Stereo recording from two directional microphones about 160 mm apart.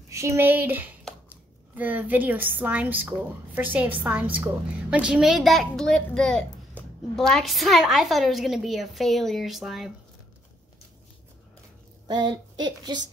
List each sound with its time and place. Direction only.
0.1 s a woman's voice: 15° right (ahead or behind); by 9.8 s centre (ahead or behind)
12.1 s speech: 25° right (ahead or behind)